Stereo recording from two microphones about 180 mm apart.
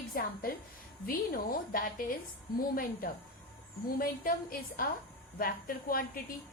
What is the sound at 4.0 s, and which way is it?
A woman's voice, 55° left (ahead or behind).